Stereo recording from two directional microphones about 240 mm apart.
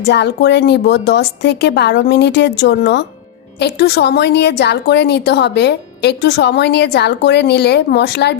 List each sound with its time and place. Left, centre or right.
0.1 s a woman's voice: left